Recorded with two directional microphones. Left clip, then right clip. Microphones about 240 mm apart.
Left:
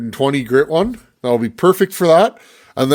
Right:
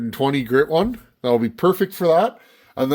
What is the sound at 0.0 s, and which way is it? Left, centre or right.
Speech, centre.